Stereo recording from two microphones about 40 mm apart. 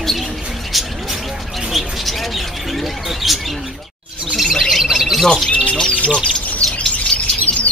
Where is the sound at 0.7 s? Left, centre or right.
Centre.